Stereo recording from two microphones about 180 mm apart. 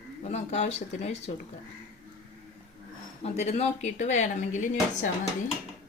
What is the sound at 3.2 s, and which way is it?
Speech, 40° left (ahead or behind).